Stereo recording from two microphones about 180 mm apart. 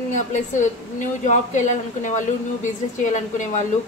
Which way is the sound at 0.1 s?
45° left (ahead or behind).